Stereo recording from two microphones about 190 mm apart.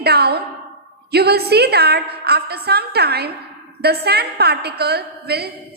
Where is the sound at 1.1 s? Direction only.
55° right (ahead or behind).